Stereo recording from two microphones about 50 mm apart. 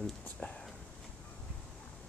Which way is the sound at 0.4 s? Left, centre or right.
Left.